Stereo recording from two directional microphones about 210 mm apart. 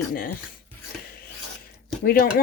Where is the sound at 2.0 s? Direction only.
45° left (ahead or behind).